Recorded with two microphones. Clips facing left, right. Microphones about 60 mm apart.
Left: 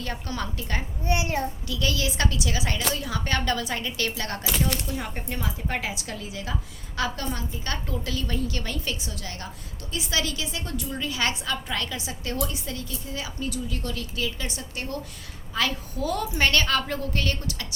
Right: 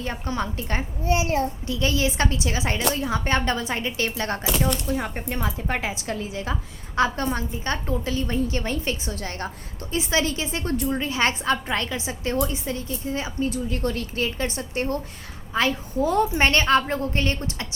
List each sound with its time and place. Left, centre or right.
0.0 s a woman's voice: right